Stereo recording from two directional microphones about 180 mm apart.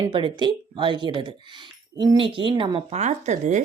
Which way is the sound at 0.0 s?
25° right (ahead or behind).